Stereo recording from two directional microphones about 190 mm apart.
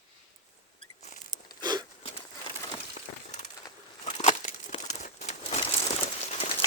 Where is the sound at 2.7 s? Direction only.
40° left (ahead or behind).